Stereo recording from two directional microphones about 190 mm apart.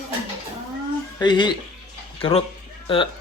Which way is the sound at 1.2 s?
25° left (ahead or behind).